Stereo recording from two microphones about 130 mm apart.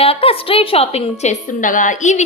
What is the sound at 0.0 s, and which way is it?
A woman's voice, 45° left (ahead or behind).